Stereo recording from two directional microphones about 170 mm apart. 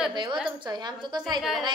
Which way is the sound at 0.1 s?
25° right (ahead or behind).